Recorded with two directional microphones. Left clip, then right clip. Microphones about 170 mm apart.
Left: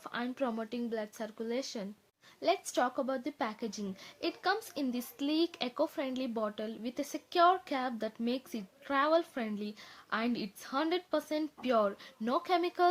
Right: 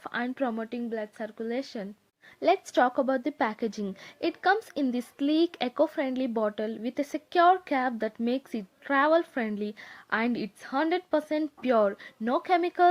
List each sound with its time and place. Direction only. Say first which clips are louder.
0.0 s speech: right 5 dB; 30° right (ahead or behind)
2.4 s a woman's voice: right 7 dB; 40° right (ahead or behind)